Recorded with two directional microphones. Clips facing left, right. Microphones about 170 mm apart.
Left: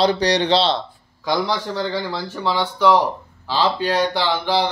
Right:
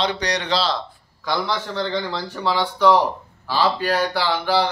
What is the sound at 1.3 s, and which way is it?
Speech, 10° left (ahead or behind).